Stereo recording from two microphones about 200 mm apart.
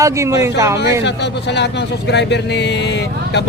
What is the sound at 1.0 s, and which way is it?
Speech, 60° left (ahead or behind).